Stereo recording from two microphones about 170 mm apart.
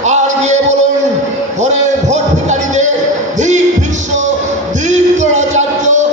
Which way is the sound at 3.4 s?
45° right (ahead or behind).